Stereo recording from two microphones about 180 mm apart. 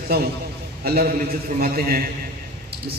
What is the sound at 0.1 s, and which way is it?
A man's voice, 60° right (ahead or behind).